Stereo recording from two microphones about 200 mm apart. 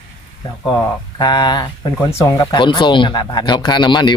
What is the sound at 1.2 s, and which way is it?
Speech, 20° left (ahead or behind).